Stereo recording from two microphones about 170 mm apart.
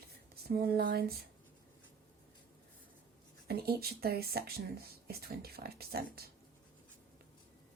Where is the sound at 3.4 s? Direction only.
65° right (ahead or behind).